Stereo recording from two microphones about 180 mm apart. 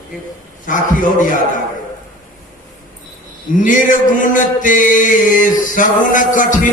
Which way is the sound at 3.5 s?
45° left (ahead or behind).